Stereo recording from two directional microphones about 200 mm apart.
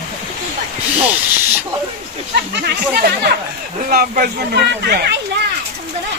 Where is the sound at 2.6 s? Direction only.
50° right (ahead or behind).